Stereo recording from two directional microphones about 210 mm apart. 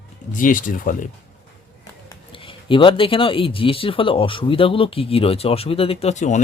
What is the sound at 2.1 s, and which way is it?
A man's voice, 25° left (ahead or behind).